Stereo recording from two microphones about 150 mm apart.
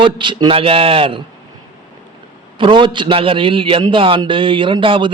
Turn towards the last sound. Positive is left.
turn(degrees=-35)  # may be behind; listen again after turning